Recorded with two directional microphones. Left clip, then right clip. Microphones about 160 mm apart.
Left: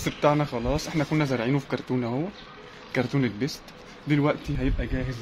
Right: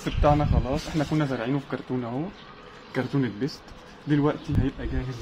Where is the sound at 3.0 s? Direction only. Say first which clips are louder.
Left 1 dB; 30° left (ahead or behind).